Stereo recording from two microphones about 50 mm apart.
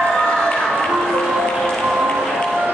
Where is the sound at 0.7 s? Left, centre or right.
Centre.